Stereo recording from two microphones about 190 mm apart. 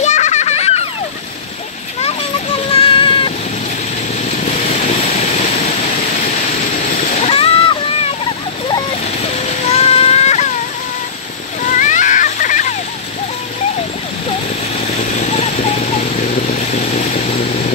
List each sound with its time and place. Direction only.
0.0 s children playing: 40° left (ahead or behind)
2.7 s synthetic singing: 30° left (ahead or behind)
5.0 s vehicle: 35° left (ahead or behind)
7.2 s splash: 30° left (ahead or behind)
9.7 s vehicle: 30° left (ahead or behind)
11.6 s music: 40° left (ahead or behind)
15.1 s vehicle: 35° left (ahead or behind)